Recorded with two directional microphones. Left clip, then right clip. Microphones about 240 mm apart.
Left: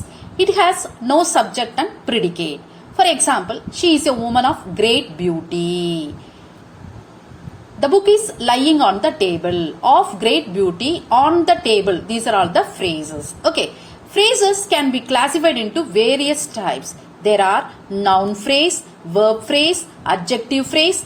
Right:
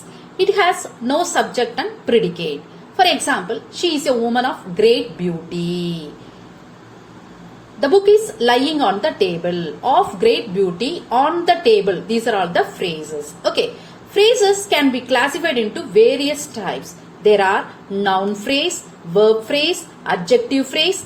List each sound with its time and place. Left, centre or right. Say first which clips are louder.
0.3 s a woman's voice: left 1 dB; left
8.0 s a woman's voice: right 1 dB; left
14.1 s a woman's voice: right 1 dB; left